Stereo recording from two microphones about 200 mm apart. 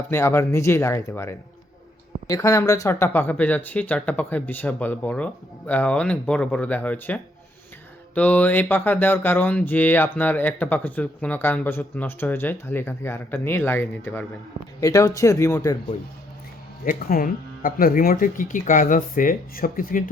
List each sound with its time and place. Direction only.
0.1 s speech: 10° left (ahead or behind)
16.8 s speech: 45° left (ahead or behind)